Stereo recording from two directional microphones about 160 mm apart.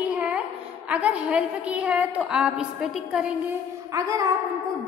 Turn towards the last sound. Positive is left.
turn(degrees=-20)  # may be behind; listen again after turning